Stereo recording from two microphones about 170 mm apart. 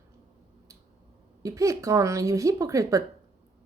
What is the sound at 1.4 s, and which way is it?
Speech, 20° right (ahead or behind).